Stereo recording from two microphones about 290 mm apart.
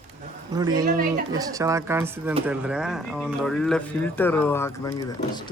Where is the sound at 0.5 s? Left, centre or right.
Centre.